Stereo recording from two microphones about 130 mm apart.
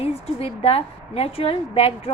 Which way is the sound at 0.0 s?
50° left (ahead or behind).